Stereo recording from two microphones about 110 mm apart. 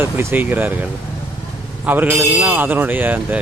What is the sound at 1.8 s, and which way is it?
Speech, 15° right (ahead or behind).